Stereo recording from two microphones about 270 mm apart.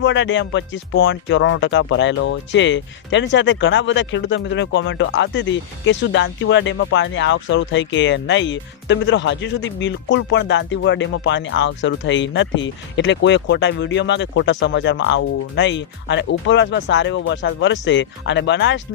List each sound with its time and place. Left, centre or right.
0.0 s speech: left